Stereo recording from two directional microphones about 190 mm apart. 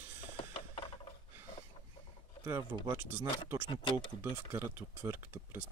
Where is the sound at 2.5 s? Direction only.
20° right (ahead or behind).